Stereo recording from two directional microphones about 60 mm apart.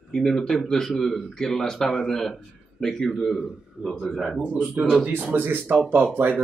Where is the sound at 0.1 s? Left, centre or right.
Centre.